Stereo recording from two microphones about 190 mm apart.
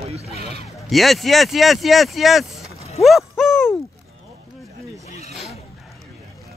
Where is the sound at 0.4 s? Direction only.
55° right (ahead or behind).